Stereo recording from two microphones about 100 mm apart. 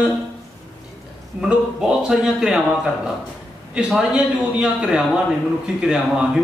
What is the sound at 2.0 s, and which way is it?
Speech, 5° right (ahead or behind).